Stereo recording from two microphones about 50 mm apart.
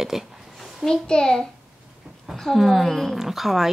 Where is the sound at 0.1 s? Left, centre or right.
Centre.